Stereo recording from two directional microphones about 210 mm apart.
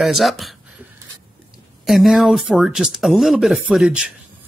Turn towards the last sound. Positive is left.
turn(degrees=-5)  # may be behind; listen again after turning